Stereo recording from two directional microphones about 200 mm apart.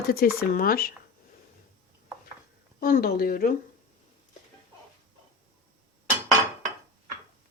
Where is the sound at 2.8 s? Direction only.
50° left (ahead or behind).